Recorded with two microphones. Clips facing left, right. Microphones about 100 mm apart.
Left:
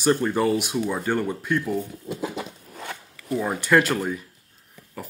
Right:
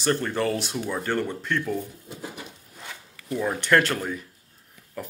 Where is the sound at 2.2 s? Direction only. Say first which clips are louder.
Left 7 dB; 80° left; by 3.0 s 65° left (ahead or behind).